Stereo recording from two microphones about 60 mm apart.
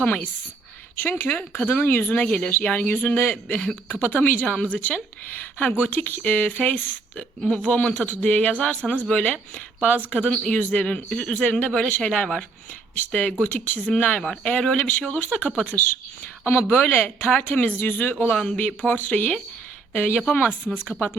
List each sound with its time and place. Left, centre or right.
0.0 s speech: left; by 10.6 s centre
10.6 s speech: left
13.4 s speech: left
16.4 s speech: left